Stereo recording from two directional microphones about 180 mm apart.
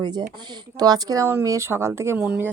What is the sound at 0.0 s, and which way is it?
Speech, 25° right (ahead or behind).